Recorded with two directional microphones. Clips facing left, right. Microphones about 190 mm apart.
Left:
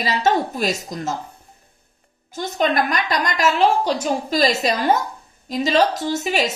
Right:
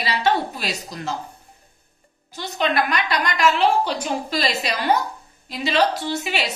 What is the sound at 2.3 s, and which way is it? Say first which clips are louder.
A woman's voice: left 3 dB; 45° left (ahead or behind).